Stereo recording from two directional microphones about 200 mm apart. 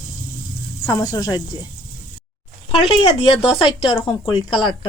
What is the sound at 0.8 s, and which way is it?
Speech, 20° left (ahead or behind).